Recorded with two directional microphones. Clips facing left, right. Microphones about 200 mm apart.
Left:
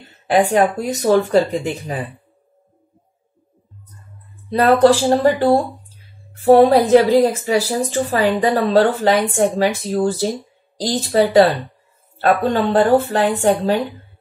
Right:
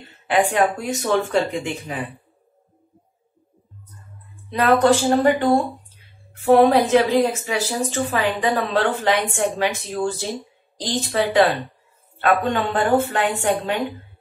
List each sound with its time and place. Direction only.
0.3 s speech: 40° left (ahead or behind)
4.5 s speech: 35° left (ahead or behind)